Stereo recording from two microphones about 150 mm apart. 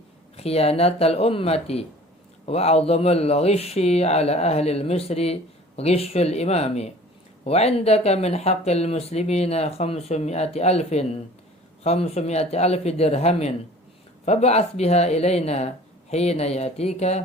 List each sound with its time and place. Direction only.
0.3 s speech: 40° left (ahead or behind)